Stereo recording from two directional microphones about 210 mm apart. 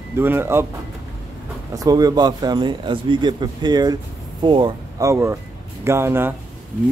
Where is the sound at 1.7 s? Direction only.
15° right (ahead or behind).